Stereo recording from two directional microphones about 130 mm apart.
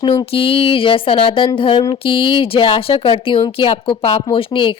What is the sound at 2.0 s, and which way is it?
A woman's voice, 45° left (ahead or behind).